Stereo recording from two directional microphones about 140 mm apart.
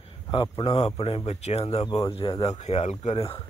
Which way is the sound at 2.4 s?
50° left (ahead or behind).